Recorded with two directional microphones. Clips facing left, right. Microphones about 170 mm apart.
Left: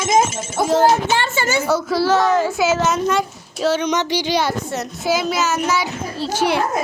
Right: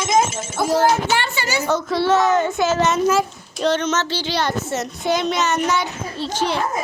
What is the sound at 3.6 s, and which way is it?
Speech, 10° left (ahead or behind).